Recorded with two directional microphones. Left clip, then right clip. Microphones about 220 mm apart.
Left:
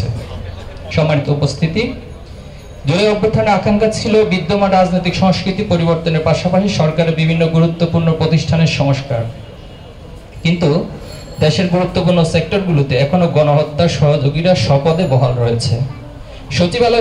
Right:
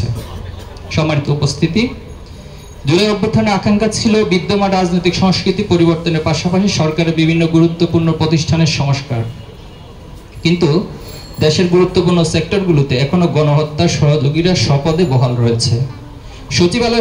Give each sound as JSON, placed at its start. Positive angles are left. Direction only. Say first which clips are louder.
{"t": 0.8, "sound": "a man's voice", "louder": "left 2 dB", "side_deg": -50}
{"t": 10.4, "sound": "a man's voice", "louder": "right 1 dB", "side_deg": -50}